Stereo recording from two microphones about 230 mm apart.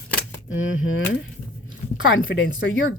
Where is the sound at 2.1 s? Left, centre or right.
Left.